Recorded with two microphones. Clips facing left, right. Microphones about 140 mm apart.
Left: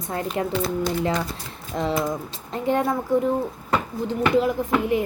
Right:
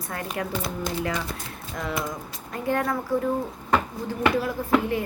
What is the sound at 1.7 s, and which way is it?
Speech, 25° left (ahead or behind).